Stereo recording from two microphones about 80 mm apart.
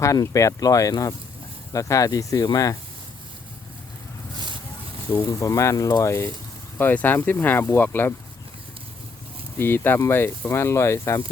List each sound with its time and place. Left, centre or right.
0.0 s speech: left
4.4 s vehicle: right
5.1 s speech: left
6.7 s speech: left
9.6 s speech: left